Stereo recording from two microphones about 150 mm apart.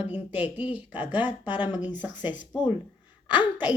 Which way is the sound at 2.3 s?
30° left (ahead or behind).